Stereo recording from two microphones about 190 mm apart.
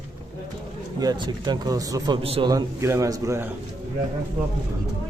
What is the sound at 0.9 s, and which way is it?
A man's voice, 20° right (ahead or behind).